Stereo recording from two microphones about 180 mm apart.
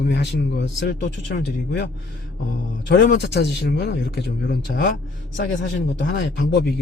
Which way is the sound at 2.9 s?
70° left (ahead or behind).